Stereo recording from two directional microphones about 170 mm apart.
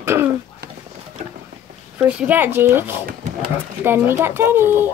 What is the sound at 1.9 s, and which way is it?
Speech, 10° right (ahead or behind).